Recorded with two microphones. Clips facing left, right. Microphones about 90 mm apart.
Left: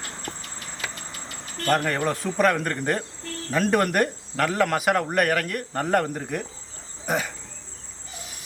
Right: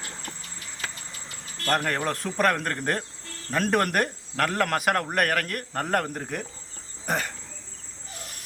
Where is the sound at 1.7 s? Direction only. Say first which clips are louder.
Left 3 dB; centre (ahead or behind).